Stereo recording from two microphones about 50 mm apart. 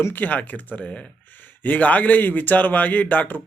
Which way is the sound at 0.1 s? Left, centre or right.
Left.